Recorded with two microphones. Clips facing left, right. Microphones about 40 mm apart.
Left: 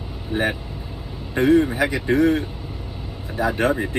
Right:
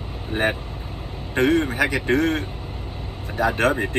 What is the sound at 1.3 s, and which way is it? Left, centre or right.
A man's voice, right.